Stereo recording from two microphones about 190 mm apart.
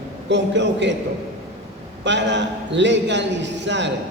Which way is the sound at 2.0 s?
70° right (ahead or behind).